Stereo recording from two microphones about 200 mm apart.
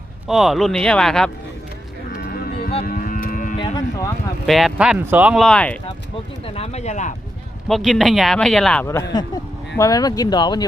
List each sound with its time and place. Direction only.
0.3 s speech: centre (ahead or behind)
2.1 s a sound: 45° left (ahead or behind)
2.8 s moo: 45° left (ahead or behind)
3.6 s speech: 20° left (ahead or behind)
4.4 s speech: centre (ahead or behind)
6.5 s speech: 30° left (ahead or behind)
7.7 s speech: centre (ahead or behind); by 10.6 s 20° left (ahead or behind)